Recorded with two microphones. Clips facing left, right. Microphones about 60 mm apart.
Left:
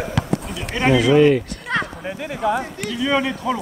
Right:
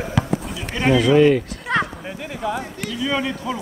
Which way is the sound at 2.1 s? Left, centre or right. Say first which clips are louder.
Left 4 dB; centre.